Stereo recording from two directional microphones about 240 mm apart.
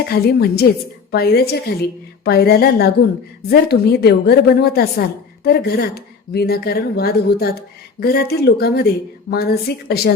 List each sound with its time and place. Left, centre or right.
0.1 s a woman's voice: left